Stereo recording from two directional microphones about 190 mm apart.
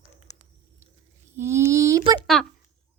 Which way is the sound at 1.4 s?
15° right (ahead or behind).